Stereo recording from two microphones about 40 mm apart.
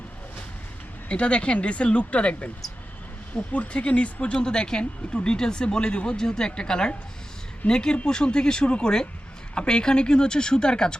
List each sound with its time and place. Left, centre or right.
1.0 s speech: left
6.1 s speech: centre